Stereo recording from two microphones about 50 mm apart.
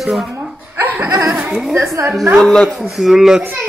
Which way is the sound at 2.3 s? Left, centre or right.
Centre.